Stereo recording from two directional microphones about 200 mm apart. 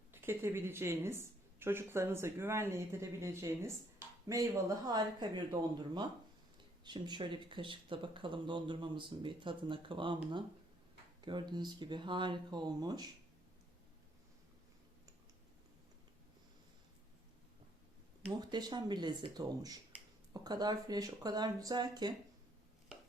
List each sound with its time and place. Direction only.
0.1 s speech: 10° right (ahead or behind)
4.9 s speech: 20° right (ahead or behind)
18.3 s speech: 20° right (ahead or behind)